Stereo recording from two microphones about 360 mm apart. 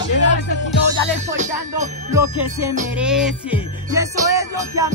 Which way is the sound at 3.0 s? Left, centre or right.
Centre.